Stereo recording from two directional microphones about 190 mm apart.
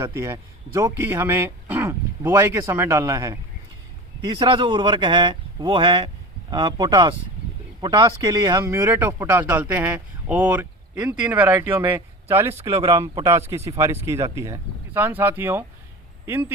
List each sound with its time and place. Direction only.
0.0 s speech: 15° right (ahead or behind)
4.4 s speech: 25° right (ahead or behind)